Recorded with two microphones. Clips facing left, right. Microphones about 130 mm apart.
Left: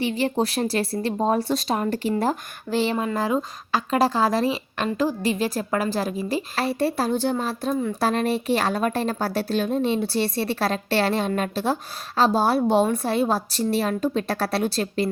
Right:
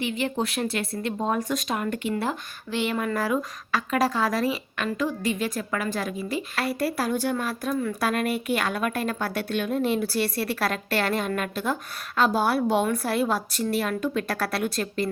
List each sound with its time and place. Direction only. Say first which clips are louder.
0.0 s speech: left 4 dB; 35° left (ahead or behind)